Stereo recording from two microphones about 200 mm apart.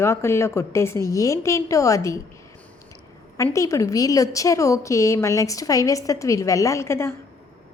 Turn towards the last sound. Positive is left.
turn(degrees=15)  # may be behind; listen again after turning